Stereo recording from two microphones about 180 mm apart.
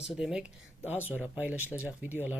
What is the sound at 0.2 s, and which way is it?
Speech, 5° right (ahead or behind).